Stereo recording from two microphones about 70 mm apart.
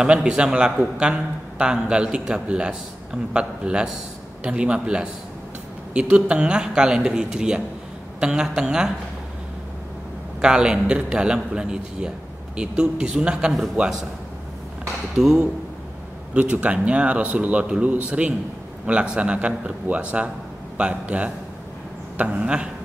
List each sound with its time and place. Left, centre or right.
0.0 s a man's voice: centre
10.4 s a man's voice: centre
15.1 s a man's voice: centre